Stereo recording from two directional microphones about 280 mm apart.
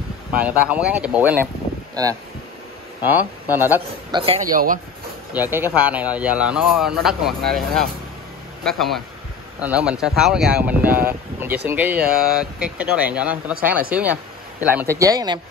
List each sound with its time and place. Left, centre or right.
0.3 s speech: centre
3.0 s a man's voice: centre
4.3 s a man's voice: right
5.3 s a man's voice: centre